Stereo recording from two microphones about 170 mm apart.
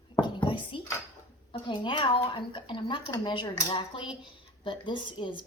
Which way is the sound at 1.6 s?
30° left (ahead or behind).